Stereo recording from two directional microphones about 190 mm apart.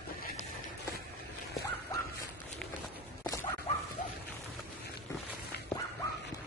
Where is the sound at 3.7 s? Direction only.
35° left (ahead or behind).